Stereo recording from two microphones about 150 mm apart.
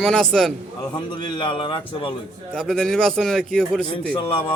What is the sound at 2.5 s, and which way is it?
A man's voice, 5° left (ahead or behind).